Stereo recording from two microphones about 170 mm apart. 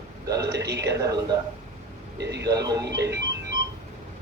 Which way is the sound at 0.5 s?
85° right.